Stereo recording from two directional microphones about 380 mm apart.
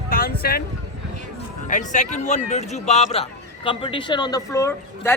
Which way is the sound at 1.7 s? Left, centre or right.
Centre.